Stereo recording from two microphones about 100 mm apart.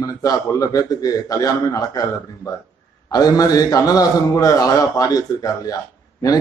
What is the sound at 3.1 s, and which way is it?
A man's voice, 40° left (ahead or behind).